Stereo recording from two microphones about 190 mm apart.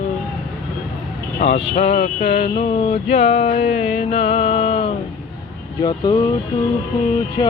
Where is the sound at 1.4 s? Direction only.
35° left (ahead or behind).